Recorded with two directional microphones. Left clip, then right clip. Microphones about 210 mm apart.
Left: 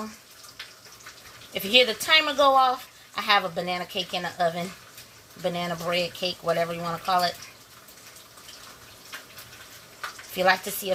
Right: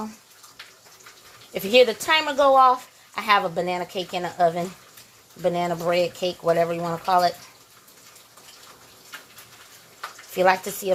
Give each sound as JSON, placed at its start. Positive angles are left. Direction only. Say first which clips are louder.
{"t": 1.5, "sound": "speech", "louder": "right 3 dB", "side_deg": -25}
{"t": 10.3, "sound": "speech", "louder": "right 3 dB", "side_deg": -25}